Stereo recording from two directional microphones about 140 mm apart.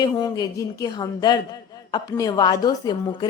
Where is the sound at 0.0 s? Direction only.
30° left (ahead or behind).